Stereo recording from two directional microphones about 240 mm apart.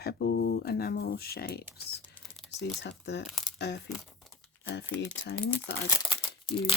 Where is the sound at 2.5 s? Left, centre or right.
Left.